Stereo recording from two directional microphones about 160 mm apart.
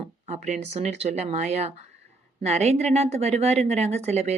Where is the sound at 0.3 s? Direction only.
45° right (ahead or behind).